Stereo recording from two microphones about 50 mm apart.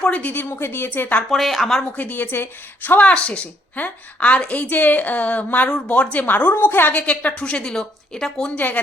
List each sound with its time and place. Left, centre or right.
0.0 s a woman's voice: left
0.6 s a woman's voice: left
1.3 s speech: centre
2.0 s a woman's voice: left
3.0 s a woman's voice: left
7.1 s a woman's voice: left
8.5 s a woman's voice: left